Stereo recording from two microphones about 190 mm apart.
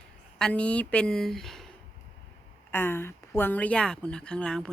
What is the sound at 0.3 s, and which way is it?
A woman's voice, 5° left (ahead or behind).